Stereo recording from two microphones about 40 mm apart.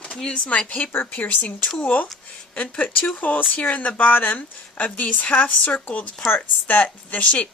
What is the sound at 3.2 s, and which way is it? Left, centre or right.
Speech, left.